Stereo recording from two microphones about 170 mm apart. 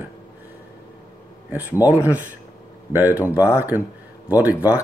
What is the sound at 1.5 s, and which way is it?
Speech, 10° right (ahead or behind).